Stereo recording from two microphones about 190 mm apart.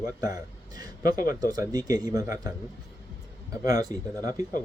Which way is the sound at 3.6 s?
20° right (ahead or behind).